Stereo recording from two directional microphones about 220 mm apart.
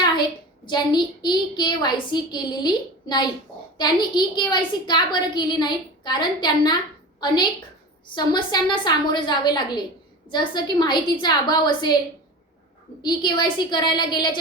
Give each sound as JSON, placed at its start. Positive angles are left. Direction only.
{"t": 0.0, "sound": "a child's voice", "side_deg": 20}
{"t": 8.1, "sound": "a woman's voice", "side_deg": 20}
{"t": 13.0, "sound": "a woman's voice", "side_deg": 20}